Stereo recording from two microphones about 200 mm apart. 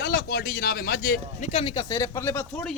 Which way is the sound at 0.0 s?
50° left (ahead or behind).